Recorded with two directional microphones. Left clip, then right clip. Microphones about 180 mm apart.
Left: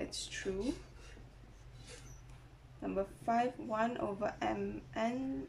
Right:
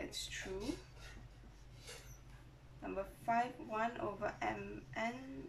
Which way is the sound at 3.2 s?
30° left (ahead or behind).